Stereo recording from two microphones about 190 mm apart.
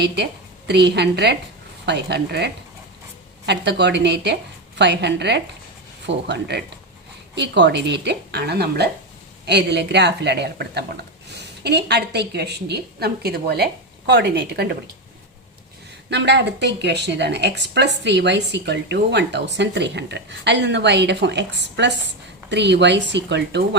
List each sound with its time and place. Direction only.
0.7 s speech: 65° right (ahead or behind)
16.0 s speech: 65° right (ahead or behind)